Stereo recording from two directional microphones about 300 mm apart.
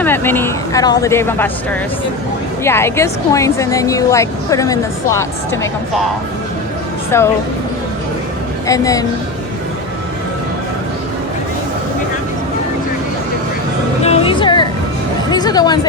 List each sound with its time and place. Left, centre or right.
0.0 s speech: centre
7.1 s speech: centre
8.6 s speech: centre
14.0 s music: centre